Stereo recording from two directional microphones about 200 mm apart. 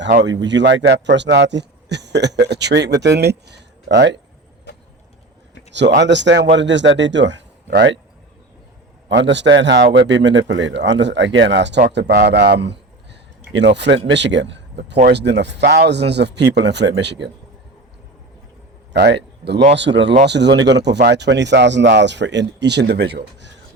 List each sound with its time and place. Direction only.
0.2 s a man's voice: 60° right (ahead or behind)
5.7 s a man's voice: 60° right (ahead or behind)
9.0 s a man's voice: 60° right (ahead or behind)
18.9 s a man's voice: 55° right (ahead or behind)